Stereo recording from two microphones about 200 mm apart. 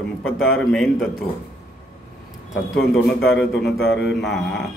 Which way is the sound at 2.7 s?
Centre (ahead or behind).